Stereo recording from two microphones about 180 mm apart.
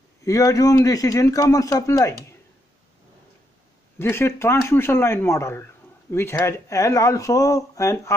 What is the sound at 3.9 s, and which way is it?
Speech, 15° left (ahead or behind).